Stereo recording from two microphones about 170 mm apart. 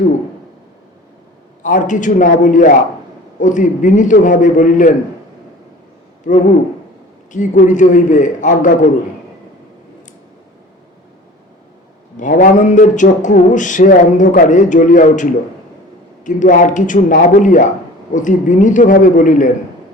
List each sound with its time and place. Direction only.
1.6 s speech: 50° left (ahead or behind)
7.3 s speech: 50° left (ahead or behind)
12.1 s speech: 50° left (ahead or behind)